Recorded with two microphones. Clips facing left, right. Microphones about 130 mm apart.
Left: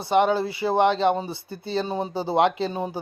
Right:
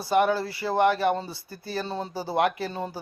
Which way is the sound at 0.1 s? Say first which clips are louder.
Left 2 dB; 20° left (ahead or behind).